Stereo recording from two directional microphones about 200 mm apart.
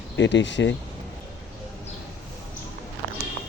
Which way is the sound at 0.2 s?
65° left (ahead or behind).